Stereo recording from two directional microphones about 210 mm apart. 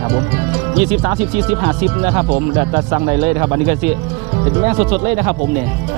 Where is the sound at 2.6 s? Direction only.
20° right (ahead or behind).